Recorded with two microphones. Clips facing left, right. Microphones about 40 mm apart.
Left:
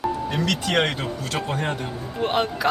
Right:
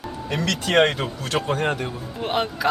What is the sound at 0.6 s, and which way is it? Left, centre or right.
Speech, right.